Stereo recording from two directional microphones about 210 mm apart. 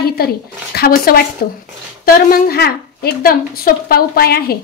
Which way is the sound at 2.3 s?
45° left (ahead or behind).